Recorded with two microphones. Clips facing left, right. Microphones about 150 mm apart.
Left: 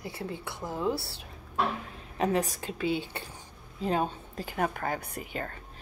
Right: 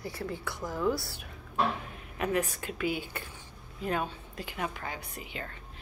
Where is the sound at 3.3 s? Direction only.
30° left (ahead or behind).